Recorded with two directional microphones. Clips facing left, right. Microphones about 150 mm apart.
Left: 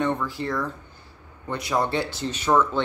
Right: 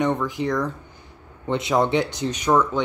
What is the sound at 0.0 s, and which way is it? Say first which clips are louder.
Speech: right 3 dB; 15° right (ahead or behind).